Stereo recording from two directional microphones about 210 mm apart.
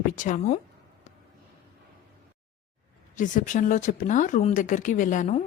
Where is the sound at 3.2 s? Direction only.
40° left (ahead or behind).